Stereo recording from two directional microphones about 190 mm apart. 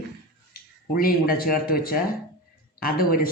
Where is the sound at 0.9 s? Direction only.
50° left (ahead or behind).